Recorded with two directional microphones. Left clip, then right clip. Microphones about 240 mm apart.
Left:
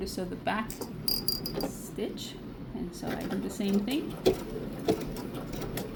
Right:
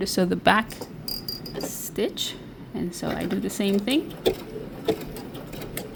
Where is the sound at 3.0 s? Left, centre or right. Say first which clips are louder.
Right 6 dB; right.